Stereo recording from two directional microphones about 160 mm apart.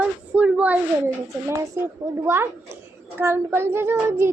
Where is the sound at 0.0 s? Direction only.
10° right (ahead or behind).